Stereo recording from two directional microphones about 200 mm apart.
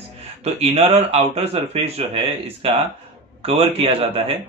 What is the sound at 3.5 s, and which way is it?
Speech, 30° right (ahead or behind).